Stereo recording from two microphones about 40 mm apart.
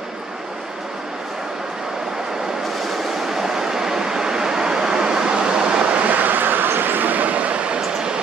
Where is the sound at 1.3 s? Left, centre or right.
Centre.